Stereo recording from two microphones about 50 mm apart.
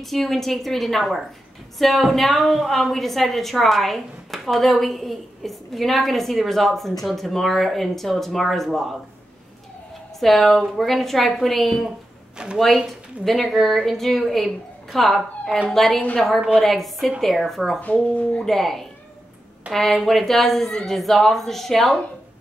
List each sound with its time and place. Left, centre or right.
0.0 s a woman's voice: centre
10.2 s a woman's voice: centre
12.4 s speech: centre
13.2 s a woman's voice: centre